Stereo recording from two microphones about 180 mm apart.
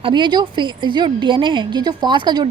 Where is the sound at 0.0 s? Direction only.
25° right (ahead or behind).